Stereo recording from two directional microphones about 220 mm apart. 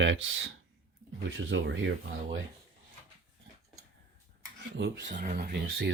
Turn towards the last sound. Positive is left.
turn(degrees=-45)  # may be behind; listen again after turning